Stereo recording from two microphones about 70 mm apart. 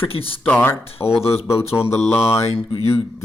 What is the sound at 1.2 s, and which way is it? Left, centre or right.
A man's voice, left.